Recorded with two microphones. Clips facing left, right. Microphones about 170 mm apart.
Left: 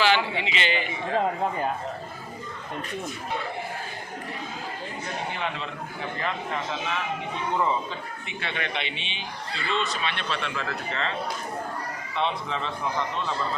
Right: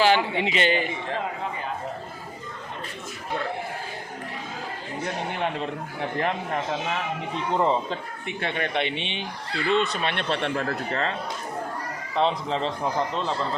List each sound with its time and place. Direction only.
0.0 s a man's voice: 45° right (ahead or behind)
5.4 s a man's voice: 55° right (ahead or behind)
7.5 s a man's voice: 30° right (ahead or behind)
8.4 s a man's voice: 45° right (ahead or behind)
12.1 s a man's voice: 35° right (ahead or behind)